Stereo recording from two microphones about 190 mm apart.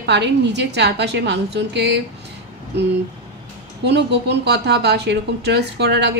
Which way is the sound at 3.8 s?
65° right (ahead or behind).